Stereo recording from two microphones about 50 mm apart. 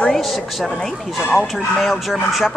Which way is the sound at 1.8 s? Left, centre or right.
Centre.